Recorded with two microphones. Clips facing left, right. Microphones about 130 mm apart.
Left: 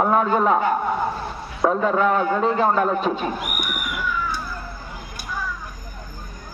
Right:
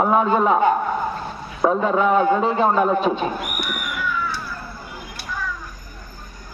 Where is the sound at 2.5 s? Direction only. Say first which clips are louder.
Right 1 dB; 15° right (ahead or behind).